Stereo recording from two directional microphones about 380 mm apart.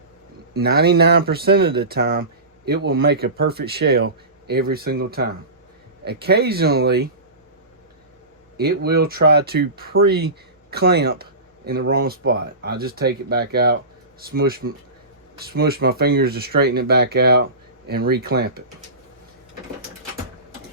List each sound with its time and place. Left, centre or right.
0.6 s speech: right
8.5 s speech: right